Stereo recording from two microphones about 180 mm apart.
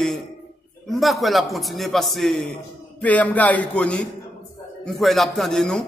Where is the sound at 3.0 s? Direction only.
10° left (ahead or behind).